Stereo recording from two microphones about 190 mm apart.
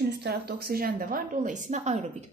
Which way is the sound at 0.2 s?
55° right (ahead or behind).